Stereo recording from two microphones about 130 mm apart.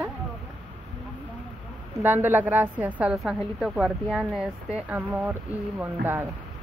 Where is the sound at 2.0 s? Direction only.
15° right (ahead or behind).